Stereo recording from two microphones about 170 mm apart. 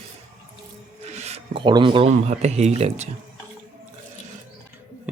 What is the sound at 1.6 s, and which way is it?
Speech, 30° right (ahead or behind).